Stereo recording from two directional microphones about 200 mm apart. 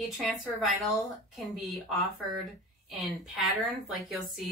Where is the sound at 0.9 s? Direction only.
Centre (ahead or behind).